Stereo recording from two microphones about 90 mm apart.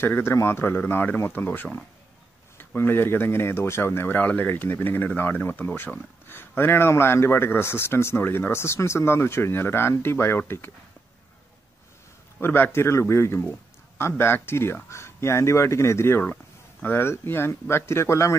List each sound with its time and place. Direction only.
0.0 s speech: 25° left (ahead or behind)
12.4 s speech: 25° left (ahead or behind)